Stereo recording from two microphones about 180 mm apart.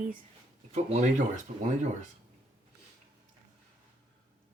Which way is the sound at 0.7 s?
40° right (ahead or behind).